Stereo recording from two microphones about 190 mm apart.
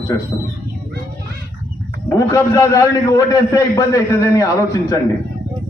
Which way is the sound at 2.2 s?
15° left (ahead or behind).